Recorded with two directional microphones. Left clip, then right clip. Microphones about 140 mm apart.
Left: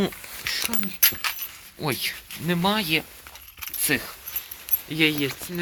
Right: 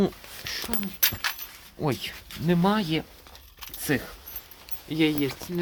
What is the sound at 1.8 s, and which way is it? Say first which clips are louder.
Speech: left 3 dB; 30° right (ahead or behind).